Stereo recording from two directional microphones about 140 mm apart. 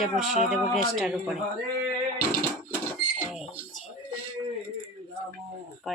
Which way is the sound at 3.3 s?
Centre (ahead or behind).